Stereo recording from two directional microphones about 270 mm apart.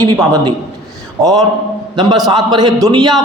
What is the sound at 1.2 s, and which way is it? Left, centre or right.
Speech, centre.